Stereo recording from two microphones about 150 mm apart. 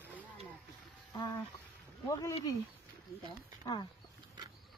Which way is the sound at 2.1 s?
25° left (ahead or behind).